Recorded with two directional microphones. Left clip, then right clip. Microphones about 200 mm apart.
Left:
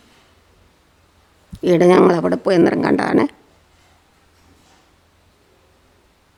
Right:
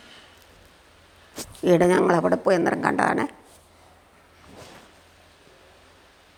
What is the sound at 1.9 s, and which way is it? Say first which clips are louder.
Speech: left 6 dB; 35° left (ahead or behind).